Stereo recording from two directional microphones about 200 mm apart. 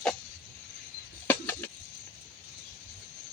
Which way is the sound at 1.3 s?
10° left (ahead or behind).